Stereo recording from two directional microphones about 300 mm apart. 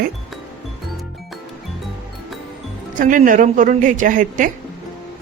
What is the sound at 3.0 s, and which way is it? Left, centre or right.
Speech, right.